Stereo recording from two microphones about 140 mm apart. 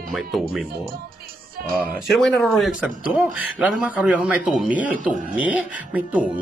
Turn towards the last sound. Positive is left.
turn(degrees=-10)  # may be behind; listen again after turning